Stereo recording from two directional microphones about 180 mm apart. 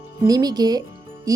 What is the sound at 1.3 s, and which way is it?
Music, 20° right (ahead or behind).